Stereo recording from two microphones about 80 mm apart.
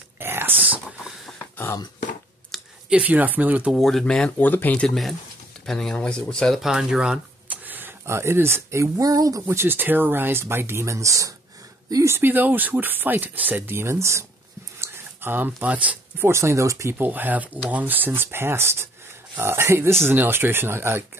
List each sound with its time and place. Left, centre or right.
0.2 s whispering: right
1.4 s cough: left
2.5 s a sound: centre
2.9 s speech: centre
3.7 s speech: centre
4.4 s speech: left
4.8 s speech: centre
6.6 s speech: centre
7.6 s speech: right
9.5 s speech: right
12.2 s speech: right
14.8 s a sound: right
16.3 s speech: right
17.0 s speech: right